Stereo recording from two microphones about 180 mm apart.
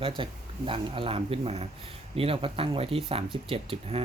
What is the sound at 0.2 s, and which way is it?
Speech, 30° right (ahead or behind).